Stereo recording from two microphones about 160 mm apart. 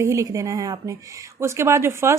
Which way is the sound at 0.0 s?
20° right (ahead or behind).